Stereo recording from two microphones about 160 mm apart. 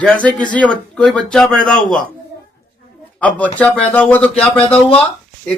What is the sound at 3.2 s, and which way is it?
A man's voice, 10° left (ahead or behind).